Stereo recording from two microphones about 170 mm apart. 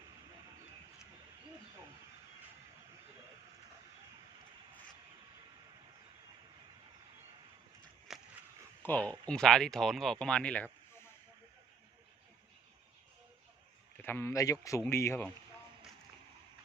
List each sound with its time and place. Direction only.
8.1 s a sound: centre (ahead or behind)
8.8 s speech: 10° left (ahead or behind)
14.0 s speech: 10° left (ahead or behind)